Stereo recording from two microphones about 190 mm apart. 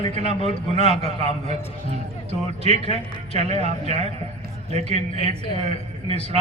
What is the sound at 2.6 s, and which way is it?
A man's voice, 35° right (ahead or behind).